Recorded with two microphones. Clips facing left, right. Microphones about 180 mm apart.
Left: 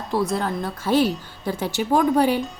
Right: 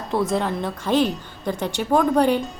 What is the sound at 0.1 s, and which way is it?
A woman's voice, centre (ahead or behind).